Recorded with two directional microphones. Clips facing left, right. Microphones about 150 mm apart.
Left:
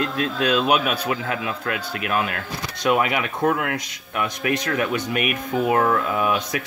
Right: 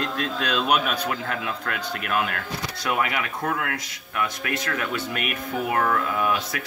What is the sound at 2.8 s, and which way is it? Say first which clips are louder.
A man's voice: left 6 dB; 20° left (ahead or behind).